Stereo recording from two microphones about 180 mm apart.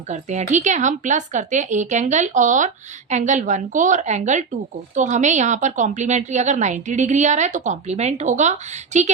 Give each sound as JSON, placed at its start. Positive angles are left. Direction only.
{"t": 0.1, "sound": "a woman's voice", "side_deg": -40}